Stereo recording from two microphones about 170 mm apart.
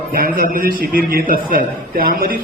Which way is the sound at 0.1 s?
55° right (ahead or behind).